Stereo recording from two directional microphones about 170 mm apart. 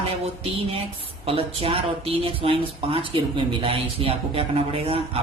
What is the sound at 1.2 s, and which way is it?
Speech, 35° right (ahead or behind).